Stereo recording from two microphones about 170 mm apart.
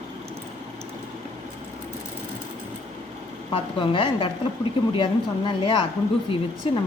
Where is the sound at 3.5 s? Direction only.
30° left (ahead or behind).